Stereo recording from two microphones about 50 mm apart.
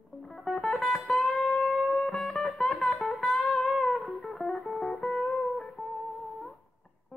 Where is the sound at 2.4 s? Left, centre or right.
Centre.